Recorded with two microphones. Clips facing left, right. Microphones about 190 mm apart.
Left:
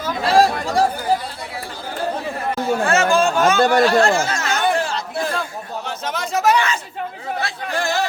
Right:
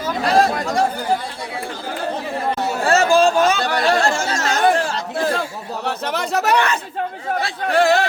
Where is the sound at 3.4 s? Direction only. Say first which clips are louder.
Left 3 dB; 50° left (ahead or behind).